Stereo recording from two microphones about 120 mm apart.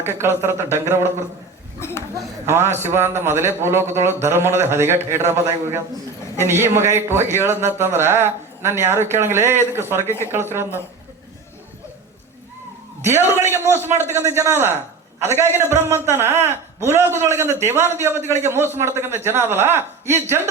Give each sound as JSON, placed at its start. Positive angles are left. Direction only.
{"t": 0.0, "sound": "speech", "side_deg": -20}
{"t": 1.8, "sound": "speech", "side_deg": 20}
{"t": 2.1, "sound": "speech", "side_deg": -20}
{"t": 10.1, "sound": "speech", "side_deg": 20}
{"t": 10.3, "sound": "speech", "side_deg": -20}
{"t": 13.0, "sound": "speech", "side_deg": -20}